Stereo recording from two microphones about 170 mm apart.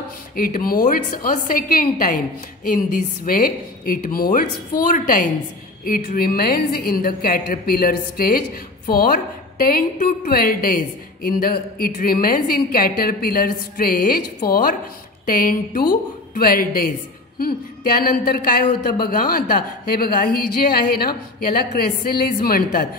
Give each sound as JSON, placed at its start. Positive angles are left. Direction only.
{"t": 0.4, "sound": "a woman's voice", "side_deg": 55}